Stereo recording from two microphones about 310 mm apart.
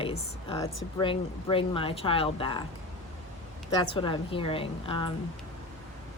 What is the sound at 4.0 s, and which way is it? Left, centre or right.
Speech, centre.